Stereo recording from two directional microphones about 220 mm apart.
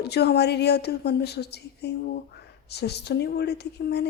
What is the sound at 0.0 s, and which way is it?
A woman's voice, 50° left (ahead or behind).